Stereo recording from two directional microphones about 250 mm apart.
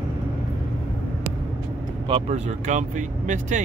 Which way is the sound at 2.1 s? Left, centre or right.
Right.